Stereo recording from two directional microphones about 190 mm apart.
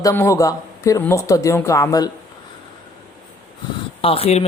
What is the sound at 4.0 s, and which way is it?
Speech, 30° left (ahead or behind).